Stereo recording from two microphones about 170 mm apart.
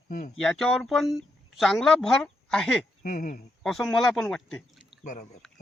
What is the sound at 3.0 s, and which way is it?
Speech, 50° left (ahead or behind).